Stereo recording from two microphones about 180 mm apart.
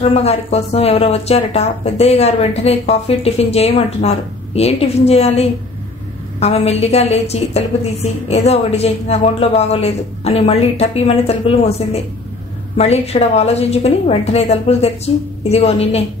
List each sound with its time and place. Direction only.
0.0 s a woman's voice: 35° left (ahead or behind)